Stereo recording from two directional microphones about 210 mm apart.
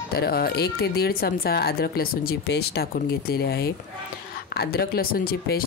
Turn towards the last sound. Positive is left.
turn(degrees=45)  # may be behind; listen again after turning